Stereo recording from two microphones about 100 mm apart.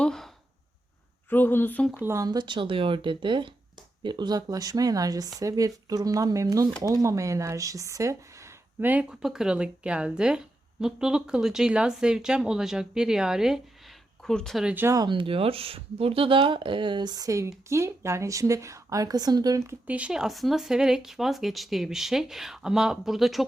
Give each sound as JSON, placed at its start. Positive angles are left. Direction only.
{"t": 0.0, "sound": "a sound", "side_deg": 5}
{"t": 1.3, "sound": "a woman's voice", "side_deg": 20}
{"t": 2.1, "sound": "a woman's voice", "side_deg": -40}
{"t": 8.8, "sound": "a woman's voice", "side_deg": -15}
{"t": 14.6, "sound": "a woman's voice", "side_deg": -10}
{"t": 15.0, "sound": "a woman's voice", "side_deg": -55}
{"t": 19.9, "sound": "speech", "side_deg": -10}